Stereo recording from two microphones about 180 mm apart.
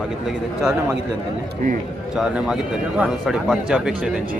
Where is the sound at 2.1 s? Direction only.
5° right (ahead or behind).